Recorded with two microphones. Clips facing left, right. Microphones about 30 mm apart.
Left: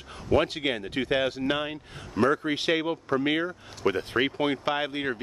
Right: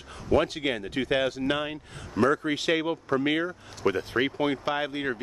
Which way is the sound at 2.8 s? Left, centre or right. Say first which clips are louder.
Even; centre.